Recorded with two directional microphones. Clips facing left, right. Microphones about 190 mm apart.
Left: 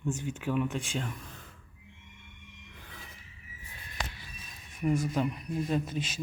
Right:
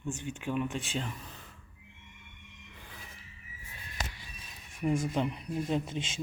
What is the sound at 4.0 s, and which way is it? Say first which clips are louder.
Music: left 1 dB; 45° right (ahead or behind).